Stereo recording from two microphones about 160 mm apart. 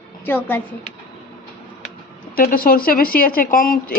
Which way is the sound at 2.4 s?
65° left (ahead or behind).